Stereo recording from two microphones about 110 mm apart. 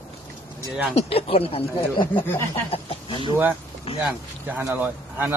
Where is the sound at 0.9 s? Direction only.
60° left (ahead or behind).